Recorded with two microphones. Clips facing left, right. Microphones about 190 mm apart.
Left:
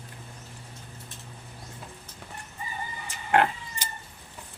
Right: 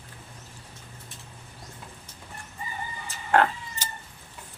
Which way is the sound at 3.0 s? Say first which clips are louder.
Right 1 dB; 15° left (ahead or behind).